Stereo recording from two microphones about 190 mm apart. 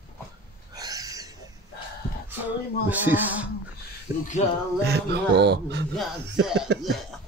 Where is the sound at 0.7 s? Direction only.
20° right (ahead or behind).